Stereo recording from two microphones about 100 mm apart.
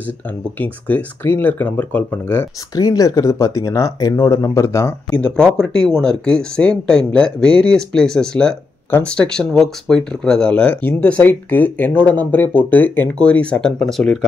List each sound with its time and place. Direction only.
0.6 s speech: 20° left (ahead or behind)
2.7 s speech: 40° left (ahead or behind)
5.1 s speech: 10° left (ahead or behind)